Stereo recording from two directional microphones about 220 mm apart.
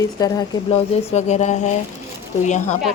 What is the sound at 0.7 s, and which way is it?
Speech, 30° left (ahead or behind).